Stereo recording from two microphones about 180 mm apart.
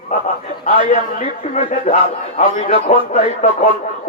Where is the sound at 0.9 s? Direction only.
40° left (ahead or behind).